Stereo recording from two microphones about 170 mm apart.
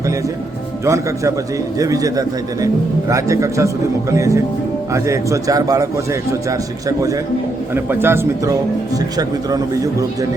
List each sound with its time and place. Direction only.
0.9 s a man's voice: 20° right (ahead or behind)